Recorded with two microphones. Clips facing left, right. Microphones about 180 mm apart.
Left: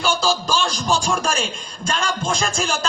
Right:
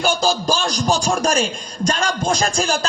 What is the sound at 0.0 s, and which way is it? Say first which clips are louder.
Speech: right 2 dB; 40° right (ahead or behind).